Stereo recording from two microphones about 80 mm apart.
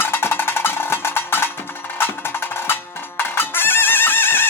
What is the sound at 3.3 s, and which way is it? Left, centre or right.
Music, left.